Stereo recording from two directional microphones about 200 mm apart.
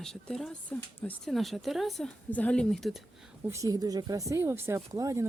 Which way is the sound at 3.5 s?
15° right (ahead or behind).